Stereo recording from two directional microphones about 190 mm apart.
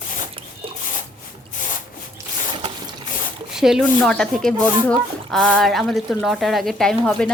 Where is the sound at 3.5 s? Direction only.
Centre (ahead or behind).